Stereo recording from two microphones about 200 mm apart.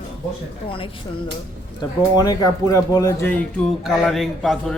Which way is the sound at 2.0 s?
20° left (ahead or behind).